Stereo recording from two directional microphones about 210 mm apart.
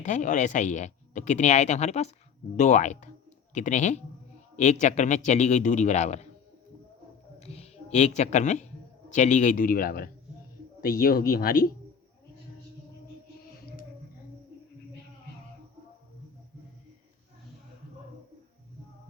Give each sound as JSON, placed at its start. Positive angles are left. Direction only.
{"t": 0.0, "sound": "speech", "side_deg": 35}
{"t": 7.3, "sound": "a sound", "side_deg": 30}
{"t": 9.1, "sound": "speech", "side_deg": 35}